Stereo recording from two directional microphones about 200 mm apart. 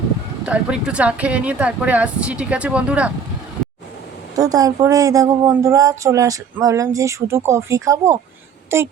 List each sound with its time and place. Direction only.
0.4 s speech: 5° right (ahead or behind)
4.4 s speech: 15° right (ahead or behind)